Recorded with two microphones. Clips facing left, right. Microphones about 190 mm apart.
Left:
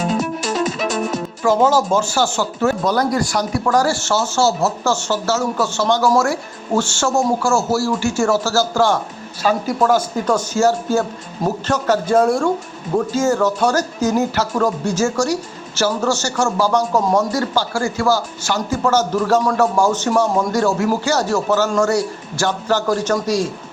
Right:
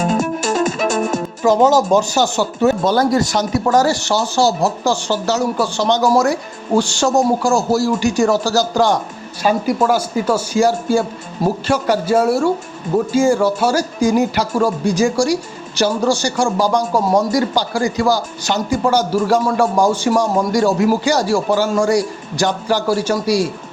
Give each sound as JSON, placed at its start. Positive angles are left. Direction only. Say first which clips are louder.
{"t": 0.0, "sound": "music", "louder": "right 3 dB", "side_deg": -45}
{"t": 1.4, "sound": "speech", "louder": "right 2 dB", "side_deg": -20}